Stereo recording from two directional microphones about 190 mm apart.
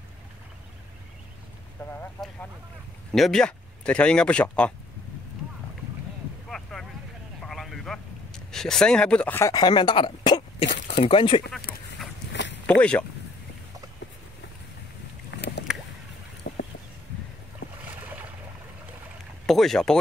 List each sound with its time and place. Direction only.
1.8 s speech: 10° left (ahead or behind)
3.1 s speech: centre (ahead or behind)
6.5 s boat: centre (ahead or behind)
7.4 s vehicle: centre (ahead or behind)
8.5 s speech: centre (ahead or behind); by 10.4 s 25° left (ahead or behind)
10.6 s a sound: 65° left (ahead or behind)
11.1 s speech: 25° left (ahead or behind)
12.3 s a sound: 70° left (ahead or behind)
12.6 s speech: 5° left (ahead or behind)
15.3 s boat: 60° left (ahead or behind)
16.5 s a sound: 60° left (ahead or behind)
18.0 s boat: 10° right (ahead or behind)
19.4 s speech: centre (ahead or behind)